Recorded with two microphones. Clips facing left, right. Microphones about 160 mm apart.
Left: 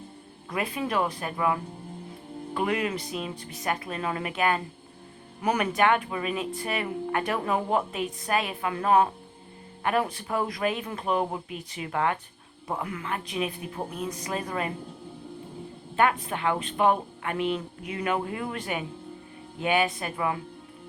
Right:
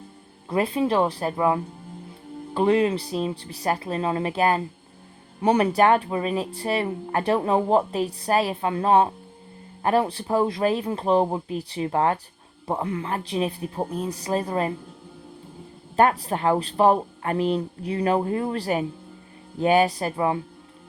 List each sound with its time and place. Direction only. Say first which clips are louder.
0.5 s speech: right 7 dB; 30° right (ahead or behind)
2.6 s speech: right 8 dB; 30° right (ahead or behind)
16.0 s speech: right 4 dB; 35° right (ahead or behind)